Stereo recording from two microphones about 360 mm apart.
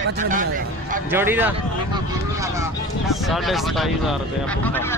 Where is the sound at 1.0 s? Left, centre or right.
Centre.